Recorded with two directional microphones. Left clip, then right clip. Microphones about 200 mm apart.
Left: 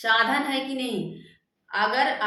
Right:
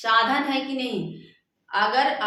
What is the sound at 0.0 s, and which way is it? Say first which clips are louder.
A woman's voice: right 1 dB; centre (ahead or behind).